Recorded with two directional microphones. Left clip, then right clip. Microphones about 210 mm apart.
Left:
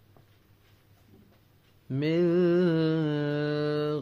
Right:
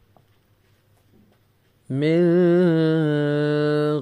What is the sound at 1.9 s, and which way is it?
Mantra, 35° right (ahead or behind).